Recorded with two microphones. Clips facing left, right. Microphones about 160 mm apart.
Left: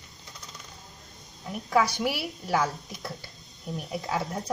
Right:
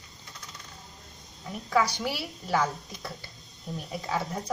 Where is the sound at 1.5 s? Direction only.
10° left (ahead or behind).